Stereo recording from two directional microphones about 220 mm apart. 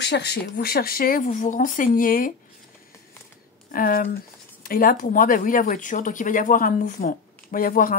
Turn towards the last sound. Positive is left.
turn(degrees=40)  # may be behind; listen again after turning